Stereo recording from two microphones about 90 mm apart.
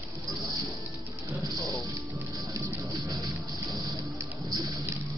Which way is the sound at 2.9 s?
40° right (ahead or behind).